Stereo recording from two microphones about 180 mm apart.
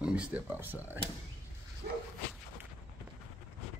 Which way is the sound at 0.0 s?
5° right (ahead or behind).